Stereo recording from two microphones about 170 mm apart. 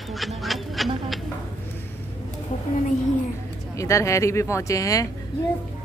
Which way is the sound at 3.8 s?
20° left (ahead or behind).